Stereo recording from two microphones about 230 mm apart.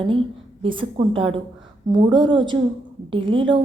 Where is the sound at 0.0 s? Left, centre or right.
Right.